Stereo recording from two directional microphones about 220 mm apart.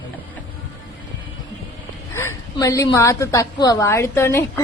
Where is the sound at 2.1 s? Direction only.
15° left (ahead or behind).